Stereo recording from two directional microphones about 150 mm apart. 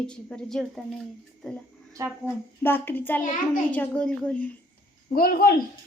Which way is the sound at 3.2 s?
65° left (ahead or behind).